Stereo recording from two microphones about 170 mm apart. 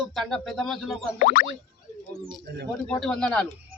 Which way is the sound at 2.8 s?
5° left (ahead or behind).